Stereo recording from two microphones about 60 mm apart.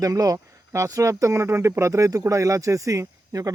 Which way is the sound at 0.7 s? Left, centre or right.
Right.